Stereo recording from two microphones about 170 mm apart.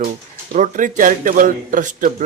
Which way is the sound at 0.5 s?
50° right (ahead or behind).